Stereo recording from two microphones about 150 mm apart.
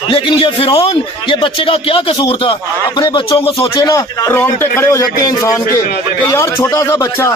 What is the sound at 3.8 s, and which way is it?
A man's voice, 25° left (ahead or behind).